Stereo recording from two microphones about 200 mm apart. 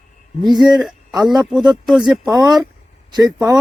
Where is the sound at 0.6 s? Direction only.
Centre (ahead or behind).